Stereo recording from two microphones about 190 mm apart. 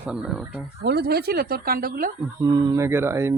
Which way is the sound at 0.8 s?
60° right (ahead or behind).